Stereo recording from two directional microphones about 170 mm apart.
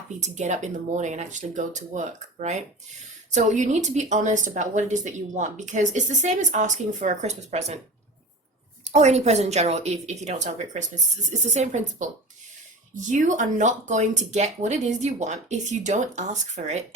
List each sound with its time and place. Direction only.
0.1 s a woman's voice: 45° right (ahead or behind)
8.8 s a woman's voice: 40° right (ahead or behind)